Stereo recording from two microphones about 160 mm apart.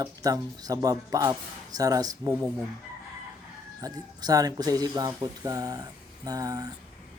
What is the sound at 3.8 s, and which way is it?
Speech, 20° right (ahead or behind).